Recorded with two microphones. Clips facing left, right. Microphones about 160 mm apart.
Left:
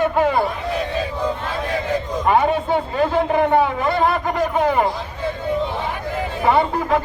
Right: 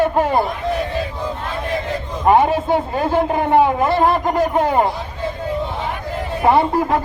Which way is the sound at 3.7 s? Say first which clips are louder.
Right 3 dB; 45° right (ahead or behind).